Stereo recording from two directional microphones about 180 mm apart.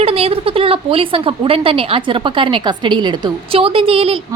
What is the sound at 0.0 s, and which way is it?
Speech, 30° right (ahead or behind).